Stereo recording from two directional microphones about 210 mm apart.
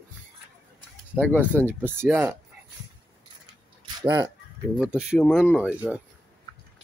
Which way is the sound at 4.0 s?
20° right (ahead or behind).